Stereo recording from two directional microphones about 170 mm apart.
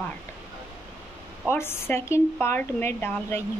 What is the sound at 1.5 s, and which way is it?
Speech, 15° left (ahead or behind).